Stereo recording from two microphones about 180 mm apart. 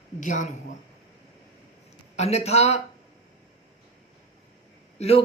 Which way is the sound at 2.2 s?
35° left (ahead or behind).